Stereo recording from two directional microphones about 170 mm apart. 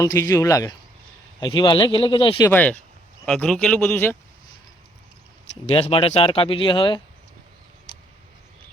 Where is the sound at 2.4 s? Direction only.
10° left (ahead or behind).